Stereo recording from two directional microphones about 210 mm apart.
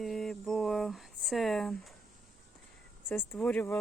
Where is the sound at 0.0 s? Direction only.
Centre (ahead or behind).